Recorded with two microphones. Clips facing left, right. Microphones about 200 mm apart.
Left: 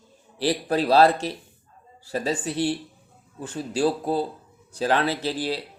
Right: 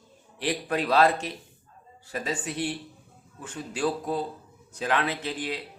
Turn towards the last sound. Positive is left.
turn(degrees=35)  # may be behind; listen again after turning